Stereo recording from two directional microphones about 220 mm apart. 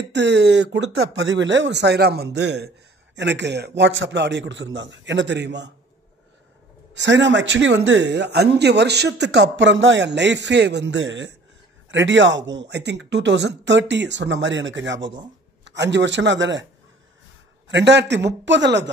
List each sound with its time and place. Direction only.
0.1 s speech: 50° right (ahead or behind)
6.9 s speech: 55° right (ahead or behind)
17.6 s speech: 55° right (ahead or behind)